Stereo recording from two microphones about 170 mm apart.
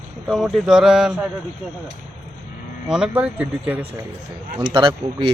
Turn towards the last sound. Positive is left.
turn(degrees=-30)  # may be behind; listen again after turning